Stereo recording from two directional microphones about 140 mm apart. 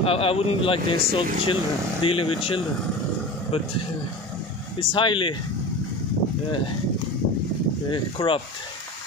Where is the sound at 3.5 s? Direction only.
45° left (ahead or behind).